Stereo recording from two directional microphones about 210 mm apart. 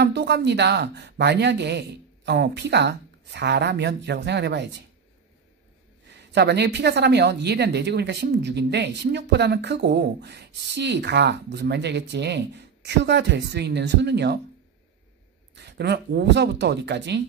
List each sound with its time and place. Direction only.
0.0 s speech: 50° right (ahead or behind)
6.0 s speech: 55° right (ahead or behind)
15.5 s speech: 55° right (ahead or behind)